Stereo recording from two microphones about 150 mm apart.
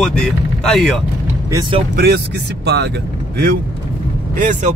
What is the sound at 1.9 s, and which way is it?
Speech, 90° right.